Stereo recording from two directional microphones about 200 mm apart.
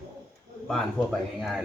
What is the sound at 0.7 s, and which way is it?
Speech, centre (ahead or behind).